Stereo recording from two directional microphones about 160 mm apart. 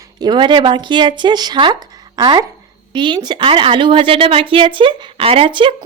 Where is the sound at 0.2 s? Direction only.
30° right (ahead or behind).